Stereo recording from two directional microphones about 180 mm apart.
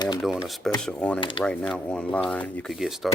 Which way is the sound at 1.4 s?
5° left (ahead or behind).